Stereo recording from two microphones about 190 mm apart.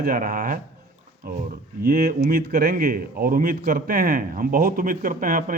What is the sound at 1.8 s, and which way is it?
A man's voice, 55° right (ahead or behind).